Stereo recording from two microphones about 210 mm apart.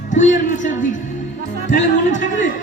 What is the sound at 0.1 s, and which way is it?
A woman's voice, 35° left (ahead or behind).